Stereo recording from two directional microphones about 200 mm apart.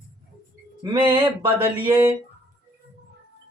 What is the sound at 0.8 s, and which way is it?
Speech, 20° right (ahead or behind).